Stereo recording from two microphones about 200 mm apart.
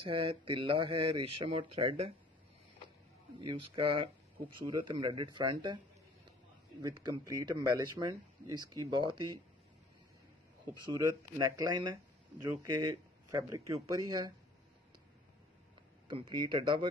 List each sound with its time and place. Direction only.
0.0 s speech: 25° right (ahead or behind)
3.3 s speech: 25° right (ahead or behind)
6.8 s speech: 20° right (ahead or behind)
10.9 s speech: 15° right (ahead or behind)
16.1 s speech: 25° right (ahead or behind)